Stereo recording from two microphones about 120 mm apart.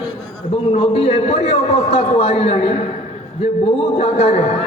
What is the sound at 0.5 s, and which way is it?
A man's voice, 55° left (ahead or behind).